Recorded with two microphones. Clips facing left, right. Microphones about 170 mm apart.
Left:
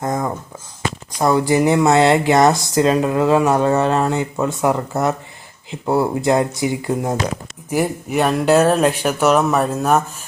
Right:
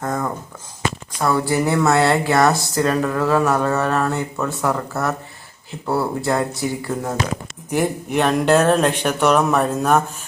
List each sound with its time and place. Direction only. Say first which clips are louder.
0.0 s a sound: left 2 dB; 15° left (ahead or behind)
1.2 s speech: left 4 dB; 15° left (ahead or behind)
7.7 s speech: left 1 dB; 5° left (ahead or behind)